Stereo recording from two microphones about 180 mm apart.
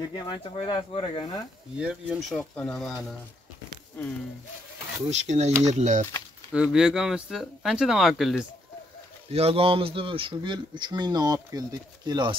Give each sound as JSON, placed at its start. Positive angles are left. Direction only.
{"t": 0.1, "sound": "speech", "side_deg": 25}
{"t": 1.8, "sound": "speech", "side_deg": -5}
{"t": 5.1, "sound": "speech", "side_deg": -40}
{"t": 6.5, "sound": "speech", "side_deg": -5}
{"t": 9.3, "sound": "speech", "side_deg": -35}